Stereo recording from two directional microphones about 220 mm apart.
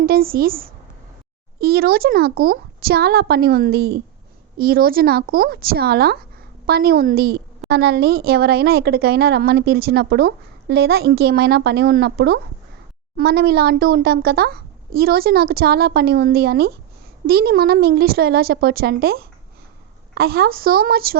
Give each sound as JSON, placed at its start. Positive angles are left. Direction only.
{"t": 0.0, "sound": "a woman's voice", "side_deg": -45}